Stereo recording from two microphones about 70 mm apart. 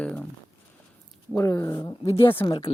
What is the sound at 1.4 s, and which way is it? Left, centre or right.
Speech, left.